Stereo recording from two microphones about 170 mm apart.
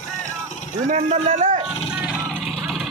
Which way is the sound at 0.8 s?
50° right (ahead or behind).